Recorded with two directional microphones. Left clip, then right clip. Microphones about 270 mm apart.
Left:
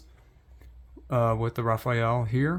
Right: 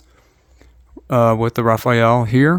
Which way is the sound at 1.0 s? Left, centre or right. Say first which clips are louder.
Right 11 dB; right.